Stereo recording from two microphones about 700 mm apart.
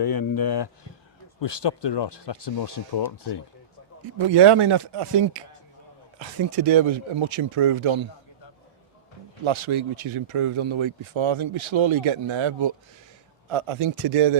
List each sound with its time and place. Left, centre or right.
0.0 s speech: left
4.3 s speech: right
9.4 s speech: right